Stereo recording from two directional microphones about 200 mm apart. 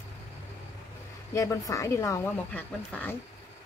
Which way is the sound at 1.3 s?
15° left (ahead or behind).